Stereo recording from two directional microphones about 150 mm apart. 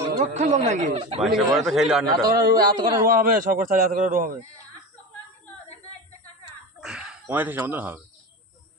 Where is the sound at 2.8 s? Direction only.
30° right (ahead or behind).